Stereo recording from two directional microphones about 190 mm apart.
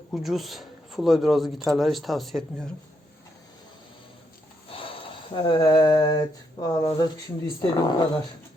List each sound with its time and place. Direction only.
0.1 s speech: centre (ahead or behind)
4.7 s a sound: 30° left (ahead or behind)
5.3 s speech: 25° left (ahead or behind)